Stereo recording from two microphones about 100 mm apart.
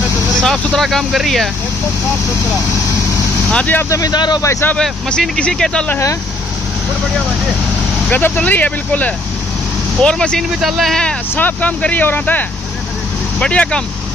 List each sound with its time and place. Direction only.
0.7 s speech: centre (ahead or behind)
3.5 s speech: 20° left (ahead or behind)
3.9 s speech: 40° left (ahead or behind)
4.4 s speech: 30° left (ahead or behind)
4.7 s speech: 5° left (ahead or behind)
8.1 s speech: 15° left (ahead or behind)